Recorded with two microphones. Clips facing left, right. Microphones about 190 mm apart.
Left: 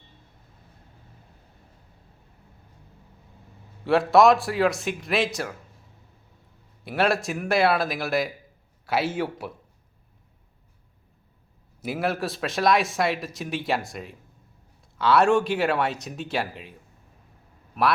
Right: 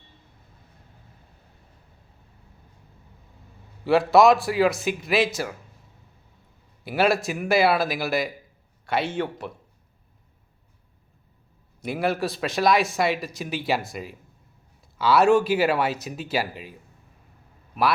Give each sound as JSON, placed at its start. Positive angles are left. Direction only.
{"t": 3.8, "sound": "a man's voice", "side_deg": 0}
{"t": 6.8, "sound": "a man's voice", "side_deg": 0}
{"t": 11.8, "sound": "a man's voice", "side_deg": 0}
{"t": 17.7, "sound": "a man's voice", "side_deg": 0}